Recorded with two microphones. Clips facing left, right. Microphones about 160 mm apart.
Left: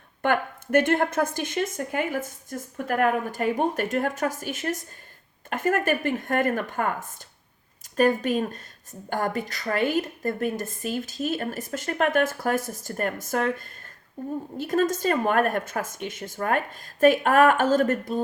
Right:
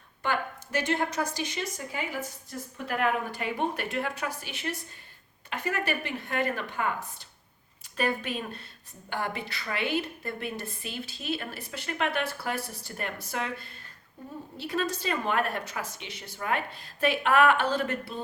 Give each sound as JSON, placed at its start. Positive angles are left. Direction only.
{"t": 0.2, "sound": "speech", "side_deg": 55}